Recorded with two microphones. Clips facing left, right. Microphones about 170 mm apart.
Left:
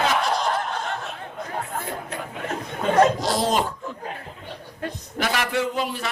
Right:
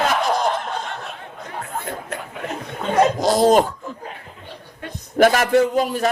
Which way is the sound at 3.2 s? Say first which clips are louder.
Right 8 dB; 45° right (ahead or behind).